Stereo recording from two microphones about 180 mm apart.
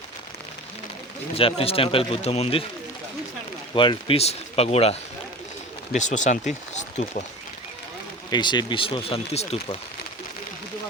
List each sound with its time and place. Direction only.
1.4 s a man's voice: 30° left (ahead or behind)
3.8 s a man's voice: 30° left (ahead or behind)
8.3 s speech: 25° left (ahead or behind)